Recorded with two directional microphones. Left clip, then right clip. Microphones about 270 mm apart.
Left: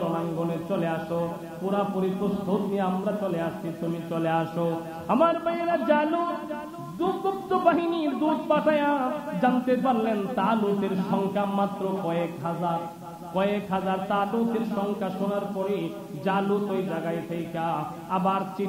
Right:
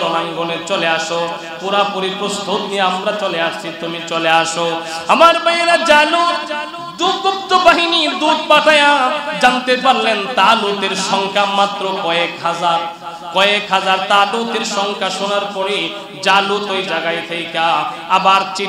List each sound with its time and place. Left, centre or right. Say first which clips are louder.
0.0 s speech: right 11 dB; centre